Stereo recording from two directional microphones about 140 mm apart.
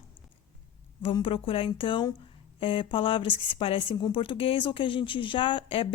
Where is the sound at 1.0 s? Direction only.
40° left (ahead or behind).